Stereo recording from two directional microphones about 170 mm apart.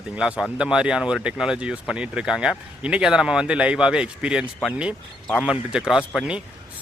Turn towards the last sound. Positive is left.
turn(degrees=-5)  # may be behind; listen again after turning